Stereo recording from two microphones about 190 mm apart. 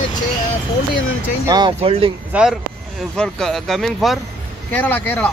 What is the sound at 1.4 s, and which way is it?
Speech, 20° right (ahead or behind).